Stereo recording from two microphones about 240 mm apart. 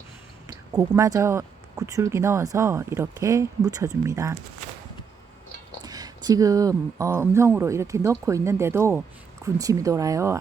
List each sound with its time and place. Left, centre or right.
0.4 s speech: centre
5.8 s speech: centre